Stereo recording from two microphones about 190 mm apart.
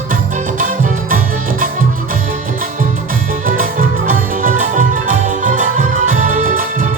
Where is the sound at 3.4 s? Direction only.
45° right (ahead or behind).